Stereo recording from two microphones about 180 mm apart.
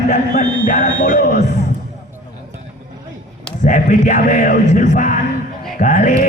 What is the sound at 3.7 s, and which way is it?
Music, 45° left (ahead or behind).